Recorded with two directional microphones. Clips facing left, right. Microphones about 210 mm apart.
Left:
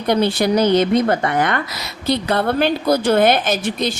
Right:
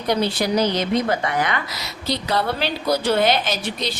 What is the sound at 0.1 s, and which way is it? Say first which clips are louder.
A woman's voice: left 4 dB; 55° left (ahead or behind).